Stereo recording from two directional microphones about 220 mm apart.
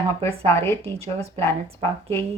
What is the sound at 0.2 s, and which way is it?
Speech, 10° left (ahead or behind).